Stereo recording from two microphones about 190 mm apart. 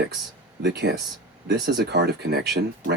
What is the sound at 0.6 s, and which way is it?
Speech, 60° right (ahead or behind).